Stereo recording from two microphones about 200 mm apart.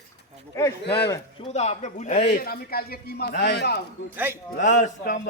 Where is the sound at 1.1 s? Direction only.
30° left (ahead or behind).